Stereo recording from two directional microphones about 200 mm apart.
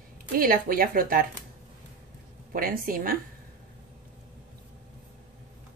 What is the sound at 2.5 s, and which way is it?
Speech, 45° right (ahead or behind).